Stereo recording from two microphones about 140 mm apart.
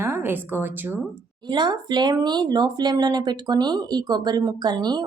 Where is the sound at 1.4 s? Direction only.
30° right (ahead or behind).